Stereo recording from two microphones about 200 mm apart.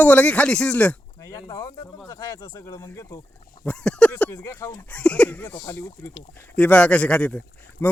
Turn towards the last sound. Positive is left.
turn(degrees=5)  # may be behind; listen again after turning